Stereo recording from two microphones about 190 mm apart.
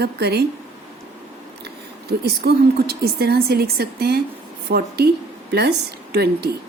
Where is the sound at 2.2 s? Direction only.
55° right (ahead or behind).